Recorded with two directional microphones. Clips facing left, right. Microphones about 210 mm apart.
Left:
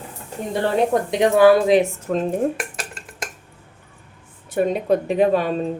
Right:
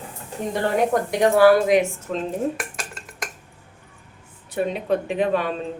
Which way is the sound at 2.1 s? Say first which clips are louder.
Left 5 dB; 45° left (ahead or behind).